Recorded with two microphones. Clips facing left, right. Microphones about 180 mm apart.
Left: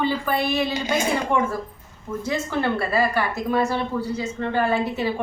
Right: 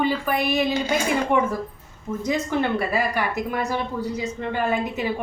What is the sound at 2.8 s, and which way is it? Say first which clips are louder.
A woman's voice: left 2 dB; 15° right (ahead or behind).